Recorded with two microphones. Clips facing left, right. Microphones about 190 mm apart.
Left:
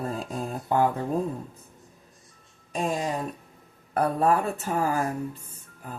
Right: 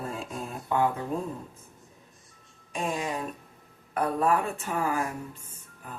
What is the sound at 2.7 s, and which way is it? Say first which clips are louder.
Speech: left 3 dB; 35° left (ahead or behind).